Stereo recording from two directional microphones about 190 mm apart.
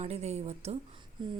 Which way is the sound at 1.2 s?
25° right (ahead or behind).